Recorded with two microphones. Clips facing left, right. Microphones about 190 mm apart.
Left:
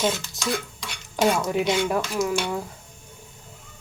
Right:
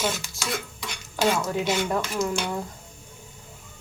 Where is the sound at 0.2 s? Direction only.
5° right (ahead or behind).